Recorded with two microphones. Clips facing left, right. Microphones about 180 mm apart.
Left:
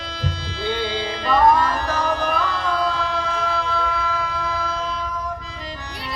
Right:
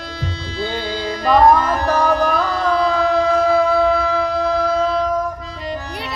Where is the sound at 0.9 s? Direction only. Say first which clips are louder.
Right 4 dB; 45° right (ahead or behind).